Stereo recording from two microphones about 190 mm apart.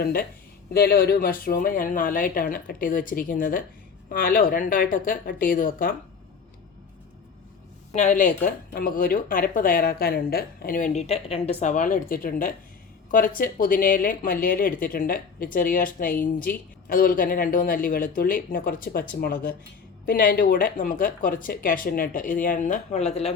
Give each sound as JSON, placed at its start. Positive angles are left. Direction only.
{"t": 0.0, "sound": "speech", "side_deg": 50}
{"t": 7.9, "sound": "speech", "side_deg": 40}